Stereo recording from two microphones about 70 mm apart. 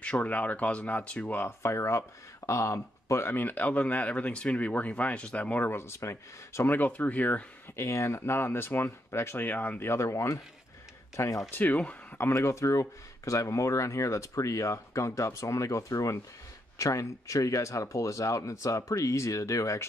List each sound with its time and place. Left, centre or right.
0.0 s speech: centre
1.6 s speech: left
3.3 s speech: left
5.7 s speech: left
6.7 s speech: left
7.7 s speech: left
11.5 s speech: left
12.2 s speech: left